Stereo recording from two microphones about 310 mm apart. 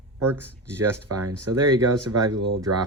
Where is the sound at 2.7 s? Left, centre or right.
Right.